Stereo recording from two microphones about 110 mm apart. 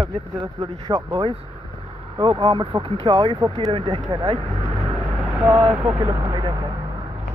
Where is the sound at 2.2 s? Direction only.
50° right (ahead or behind).